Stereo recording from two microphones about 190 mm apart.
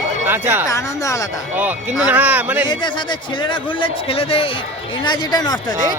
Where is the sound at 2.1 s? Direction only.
10° right (ahead or behind).